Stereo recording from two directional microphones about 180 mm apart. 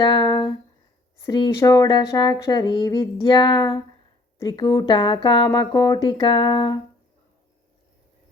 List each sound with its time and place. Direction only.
0.0 s speech: 25° left (ahead or behind)